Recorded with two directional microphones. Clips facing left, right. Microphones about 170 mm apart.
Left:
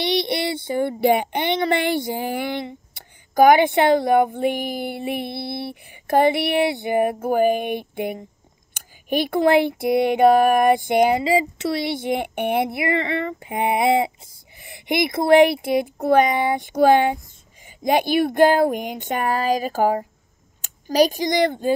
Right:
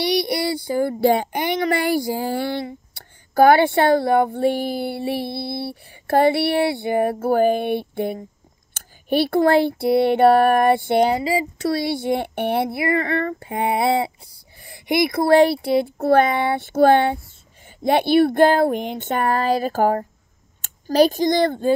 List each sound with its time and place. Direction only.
0.0 s child singing: 25° left (ahead or behind)
17.6 s speech: 15° left (ahead or behind)